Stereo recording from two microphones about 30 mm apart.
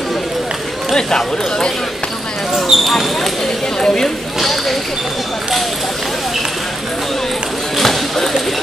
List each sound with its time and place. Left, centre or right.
0.9 s speech: left
2.7 s speech: centre
3.8 s speech: centre
4.4 s speech: centre
7.7 s a sound: centre